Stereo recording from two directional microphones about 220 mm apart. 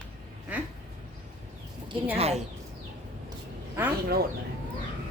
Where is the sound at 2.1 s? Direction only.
25° right (ahead or behind).